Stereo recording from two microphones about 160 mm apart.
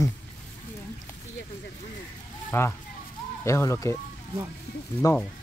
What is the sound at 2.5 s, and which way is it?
Speech, 15° left (ahead or behind).